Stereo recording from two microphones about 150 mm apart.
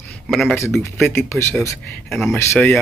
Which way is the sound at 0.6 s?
15° left (ahead or behind).